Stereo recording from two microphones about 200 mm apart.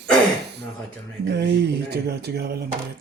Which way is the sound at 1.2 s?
55° right (ahead or behind).